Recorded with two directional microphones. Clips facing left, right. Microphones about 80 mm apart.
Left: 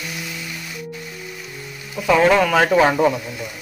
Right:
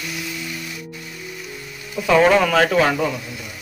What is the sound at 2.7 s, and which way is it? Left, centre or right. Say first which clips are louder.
Speech: left 3 dB; left.